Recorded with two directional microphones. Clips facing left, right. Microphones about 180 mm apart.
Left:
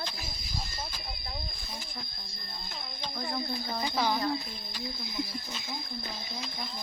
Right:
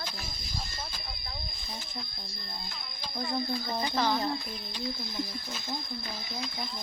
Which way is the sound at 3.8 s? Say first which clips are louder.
Even; 10° left (ahead or behind).